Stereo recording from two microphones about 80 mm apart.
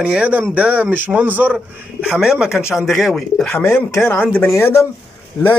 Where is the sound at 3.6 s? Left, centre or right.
Left.